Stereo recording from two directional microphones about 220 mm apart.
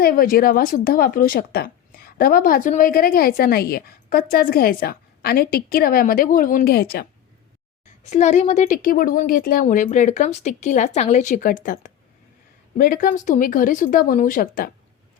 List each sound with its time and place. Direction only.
0.0 s a woman's voice: 40° left (ahead or behind)
8.0 s a woman's voice: 30° left (ahead or behind)